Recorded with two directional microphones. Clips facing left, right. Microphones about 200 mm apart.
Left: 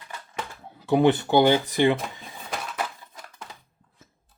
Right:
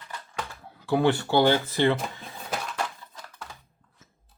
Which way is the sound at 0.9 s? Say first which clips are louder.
Left 3 dB; 20° left (ahead or behind).